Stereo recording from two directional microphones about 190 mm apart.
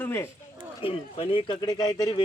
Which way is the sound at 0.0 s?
15° left (ahead or behind).